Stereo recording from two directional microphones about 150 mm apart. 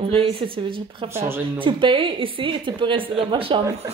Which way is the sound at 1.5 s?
35° right (ahead or behind).